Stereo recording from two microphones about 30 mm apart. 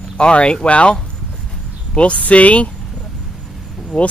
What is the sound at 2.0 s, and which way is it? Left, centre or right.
Speech, left.